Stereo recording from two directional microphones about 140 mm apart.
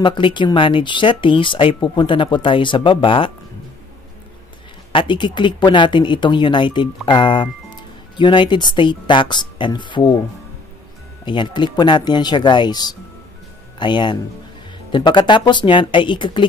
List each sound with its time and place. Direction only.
0.0 s speech: 35° left (ahead or behind)
4.9 s speech: 35° left (ahead or behind)
11.2 s speech: 35° left (ahead or behind)